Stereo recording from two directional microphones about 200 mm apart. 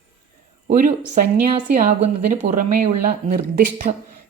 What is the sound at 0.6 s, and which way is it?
Speech, 40° right (ahead or behind).